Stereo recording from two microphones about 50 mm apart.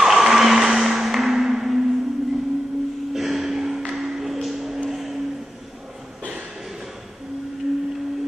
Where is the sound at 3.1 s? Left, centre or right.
Centre.